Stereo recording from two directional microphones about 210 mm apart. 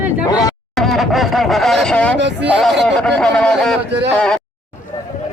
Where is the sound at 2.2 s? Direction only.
55° right (ahead or behind).